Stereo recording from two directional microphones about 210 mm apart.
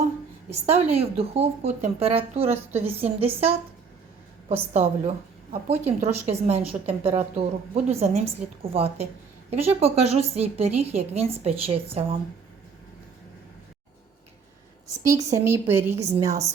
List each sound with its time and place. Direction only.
0.6 s a woman's voice: 30° right (ahead or behind)
14.8 s a woman's voice: 15° right (ahead or behind)